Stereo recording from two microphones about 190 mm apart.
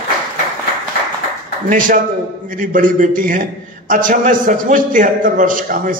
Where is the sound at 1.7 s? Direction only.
45° right (ahead or behind).